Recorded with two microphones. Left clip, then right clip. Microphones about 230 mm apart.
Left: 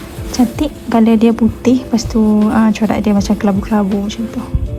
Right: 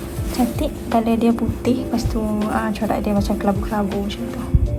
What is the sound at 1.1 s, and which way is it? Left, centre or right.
Speech, left.